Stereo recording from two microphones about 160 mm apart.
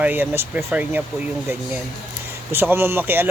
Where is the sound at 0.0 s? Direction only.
10° right (ahead or behind).